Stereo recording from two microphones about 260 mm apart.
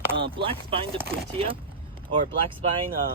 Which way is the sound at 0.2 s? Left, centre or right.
Centre.